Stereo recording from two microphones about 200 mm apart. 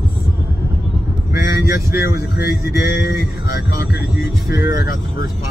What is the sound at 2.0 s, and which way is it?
Speech, 50° left (ahead or behind).